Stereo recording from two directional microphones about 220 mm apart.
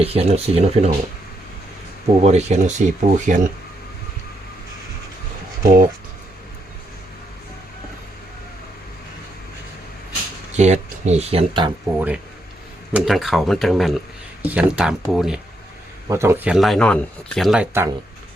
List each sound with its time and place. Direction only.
0.0 s speech: 25° right (ahead or behind)
2.2 s speech: 30° right (ahead or behind)
5.6 s speech: 40° right (ahead or behind)
10.6 s speech: 30° right (ahead or behind)
11.9 s speech: 5° right (ahead or behind)